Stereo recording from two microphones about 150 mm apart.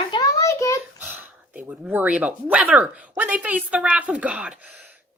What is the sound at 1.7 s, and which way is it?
Speech, 10° right (ahead or behind).